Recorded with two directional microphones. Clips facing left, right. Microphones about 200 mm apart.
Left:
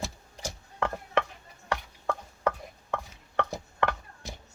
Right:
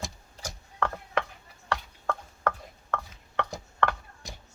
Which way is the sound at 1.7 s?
10° left (ahead or behind).